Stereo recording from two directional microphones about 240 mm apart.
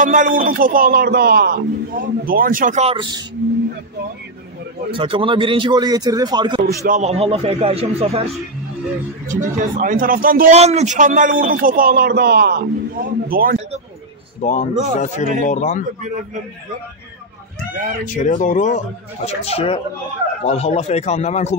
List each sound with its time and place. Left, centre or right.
0.0 s a man's voice: right
4.9 s a man's voice: right
6.9 s a man's voice: right
9.3 s a man's voice: right
14.4 s speech: left
18.0 s speech: left